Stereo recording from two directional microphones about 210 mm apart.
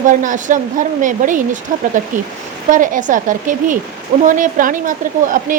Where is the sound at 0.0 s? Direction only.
40° right (ahead or behind).